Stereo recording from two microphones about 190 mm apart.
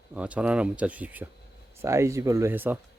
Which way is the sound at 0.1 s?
5° right (ahead or behind).